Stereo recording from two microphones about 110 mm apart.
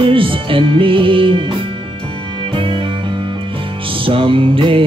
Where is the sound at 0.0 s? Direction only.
55° right (ahead or behind).